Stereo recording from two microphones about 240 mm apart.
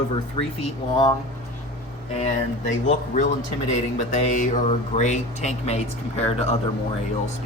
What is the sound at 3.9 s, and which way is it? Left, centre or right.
Speech, left.